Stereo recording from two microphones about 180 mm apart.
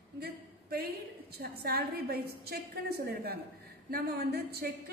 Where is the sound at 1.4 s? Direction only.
60° right (ahead or behind).